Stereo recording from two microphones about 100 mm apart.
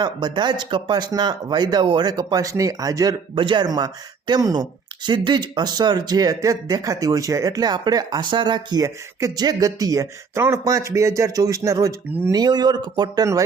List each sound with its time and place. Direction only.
0.0 s speech: 45° right (ahead or behind)
3.3 s speech: 50° right (ahead or behind)